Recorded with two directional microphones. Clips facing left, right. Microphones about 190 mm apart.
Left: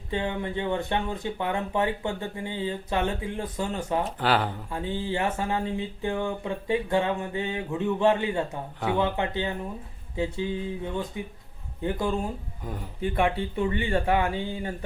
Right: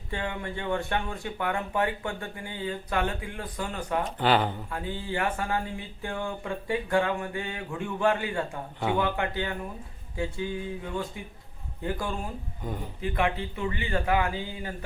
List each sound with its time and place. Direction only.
0.1 s speech: 20° left (ahead or behind)
4.0 s speech: centre (ahead or behind)
4.7 s speech: 25° left (ahead or behind)
13.1 s speech: 30° left (ahead or behind)